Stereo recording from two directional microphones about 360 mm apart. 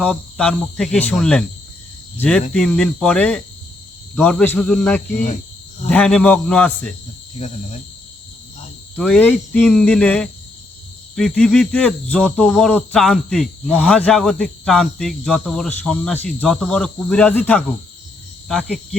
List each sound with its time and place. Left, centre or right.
0.0 s speech: centre
5.1 s speech: left
5.9 s speech: centre
7.3 s speech: centre
9.0 s speech: centre